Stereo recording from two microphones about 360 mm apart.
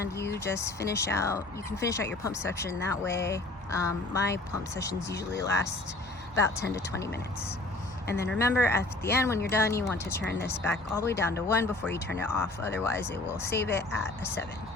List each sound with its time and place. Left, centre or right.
0.2 s speech: centre
8.0 s speech: left
8.3 s speech: centre